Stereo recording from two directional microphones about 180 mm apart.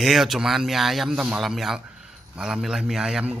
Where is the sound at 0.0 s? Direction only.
Centre (ahead or behind).